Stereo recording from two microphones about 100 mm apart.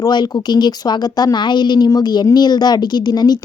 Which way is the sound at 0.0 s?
50° left (ahead or behind).